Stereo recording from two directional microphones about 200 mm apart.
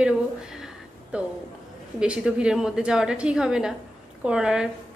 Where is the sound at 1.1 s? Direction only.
5° right (ahead or behind).